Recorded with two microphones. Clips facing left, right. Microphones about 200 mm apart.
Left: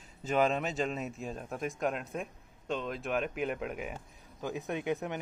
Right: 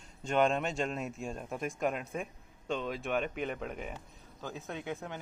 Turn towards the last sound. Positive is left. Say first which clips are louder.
# left 6 dB
turn(degrees=20)  # may be behind; listen again after turning